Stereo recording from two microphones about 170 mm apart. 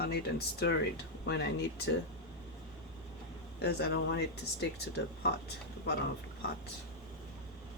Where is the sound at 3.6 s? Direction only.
80° left.